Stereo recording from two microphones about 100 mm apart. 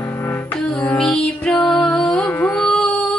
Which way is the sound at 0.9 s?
5° left (ahead or behind).